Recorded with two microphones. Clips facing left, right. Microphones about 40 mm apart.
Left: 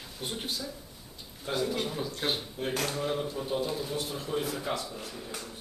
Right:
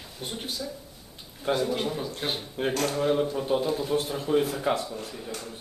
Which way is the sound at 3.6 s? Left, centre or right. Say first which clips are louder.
Right 5 dB; centre.